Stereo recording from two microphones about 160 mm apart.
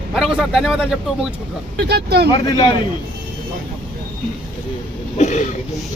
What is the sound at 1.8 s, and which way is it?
Speech, 90° right.